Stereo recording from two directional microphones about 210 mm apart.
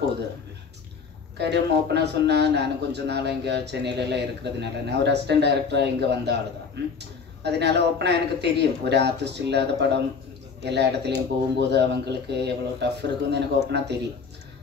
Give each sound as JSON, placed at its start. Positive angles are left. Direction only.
{"t": 1.4, "sound": "speech", "side_deg": -55}